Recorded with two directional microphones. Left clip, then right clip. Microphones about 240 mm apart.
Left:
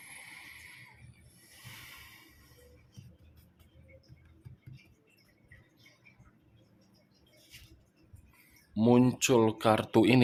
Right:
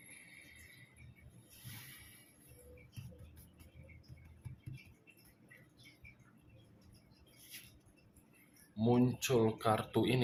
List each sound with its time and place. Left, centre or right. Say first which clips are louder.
8.7 s speech: left 8 dB; left